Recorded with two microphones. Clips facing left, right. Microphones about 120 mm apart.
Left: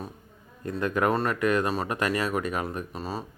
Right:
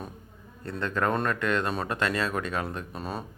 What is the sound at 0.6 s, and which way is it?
Speech, 15° left (ahead or behind).